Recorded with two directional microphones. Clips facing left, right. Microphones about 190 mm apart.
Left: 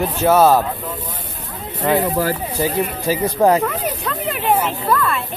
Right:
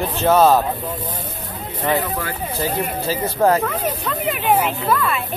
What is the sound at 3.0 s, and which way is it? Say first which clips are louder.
Speech: left 2 dB; 15° left (ahead or behind).